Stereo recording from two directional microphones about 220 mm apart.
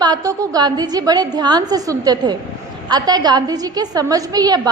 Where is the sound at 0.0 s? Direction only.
15° right (ahead or behind).